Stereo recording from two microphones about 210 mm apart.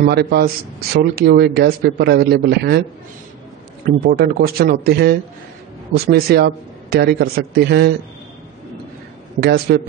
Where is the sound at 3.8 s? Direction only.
45° right (ahead or behind).